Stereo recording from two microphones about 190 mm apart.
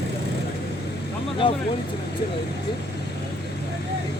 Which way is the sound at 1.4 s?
25° left (ahead or behind).